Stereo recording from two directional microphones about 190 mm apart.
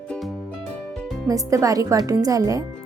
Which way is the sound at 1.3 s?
15° right (ahead or behind).